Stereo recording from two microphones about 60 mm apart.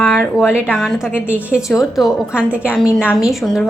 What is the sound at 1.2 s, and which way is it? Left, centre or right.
Speech, right.